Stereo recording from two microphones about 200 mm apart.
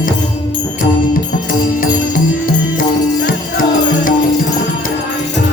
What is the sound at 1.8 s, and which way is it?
Music, 40° left (ahead or behind).